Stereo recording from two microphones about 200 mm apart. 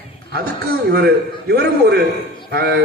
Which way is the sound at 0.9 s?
50° right (ahead or behind).